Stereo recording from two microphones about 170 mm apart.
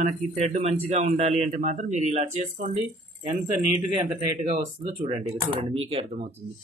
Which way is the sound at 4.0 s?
35° right (ahead or behind).